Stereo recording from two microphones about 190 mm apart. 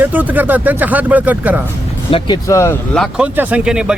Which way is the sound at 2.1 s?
20° left (ahead or behind).